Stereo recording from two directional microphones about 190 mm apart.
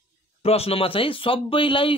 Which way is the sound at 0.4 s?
30° left (ahead or behind).